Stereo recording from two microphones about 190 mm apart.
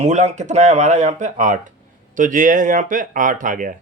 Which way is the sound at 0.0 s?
35° right (ahead or behind).